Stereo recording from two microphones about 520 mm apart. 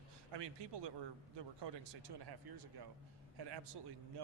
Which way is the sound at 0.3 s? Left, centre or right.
Right.